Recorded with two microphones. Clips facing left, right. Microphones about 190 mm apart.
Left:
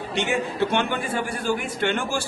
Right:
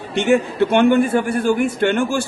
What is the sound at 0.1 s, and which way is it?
A man's voice, 55° right (ahead or behind).